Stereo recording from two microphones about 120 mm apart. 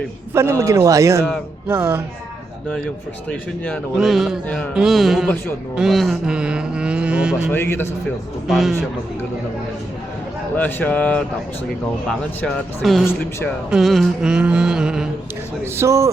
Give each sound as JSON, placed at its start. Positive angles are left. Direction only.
{"t": 0.6, "sound": "speech", "side_deg": -25}
{"t": 2.6, "sound": "speech", "side_deg": 10}
{"t": 3.9, "sound": "mantra", "side_deg": 0}
{"t": 4.4, "sound": "speech", "side_deg": 10}
{"t": 4.7, "sound": "mantra", "side_deg": -5}
{"t": 5.7, "sound": "speech", "side_deg": 0}
{"t": 7.5, "sound": "a man's voice", "side_deg": 20}
{"t": 8.4, "sound": "mantra", "side_deg": 0}
{"t": 10.5, "sound": "speech", "side_deg": 15}
{"t": 12.8, "sound": "mantra", "side_deg": 0}
{"t": 15.6, "sound": "speech", "side_deg": -20}